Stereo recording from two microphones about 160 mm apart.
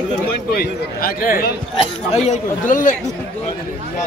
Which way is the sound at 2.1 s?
45° left (ahead or behind).